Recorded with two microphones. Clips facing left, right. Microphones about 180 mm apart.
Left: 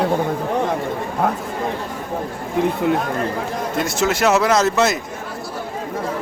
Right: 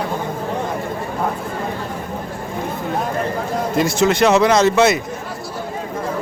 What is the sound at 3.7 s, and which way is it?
Speech, centre (ahead or behind).